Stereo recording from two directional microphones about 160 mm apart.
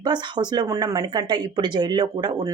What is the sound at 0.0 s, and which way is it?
Speech, 25° right (ahead or behind).